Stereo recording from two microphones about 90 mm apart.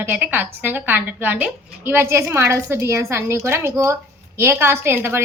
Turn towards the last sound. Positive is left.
turn(degrees=-25)  # may be behind; listen again after turning